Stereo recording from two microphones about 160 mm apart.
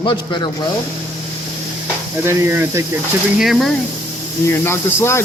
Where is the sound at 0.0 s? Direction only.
30° left (ahead or behind).